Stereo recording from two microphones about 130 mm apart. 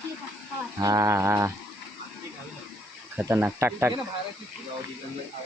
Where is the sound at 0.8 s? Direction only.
25° right (ahead or behind).